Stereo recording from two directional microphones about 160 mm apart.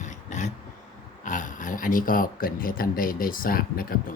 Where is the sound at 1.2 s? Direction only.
50° left (ahead or behind).